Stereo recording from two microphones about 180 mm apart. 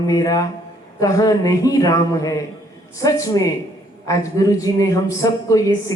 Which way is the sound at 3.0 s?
15° left (ahead or behind).